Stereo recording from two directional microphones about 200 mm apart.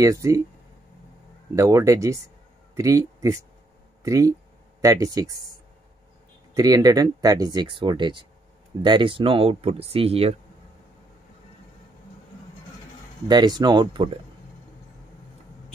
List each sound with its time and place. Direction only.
0.0 s speech: 15° right (ahead or behind)
1.5 s speech: 15° right (ahead or behind)
6.5 s speech: 20° right (ahead or behind)
13.3 s speech: 20° right (ahead or behind)